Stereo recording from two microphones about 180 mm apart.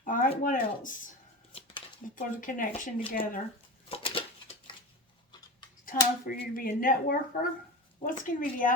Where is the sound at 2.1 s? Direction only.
50° left (ahead or behind).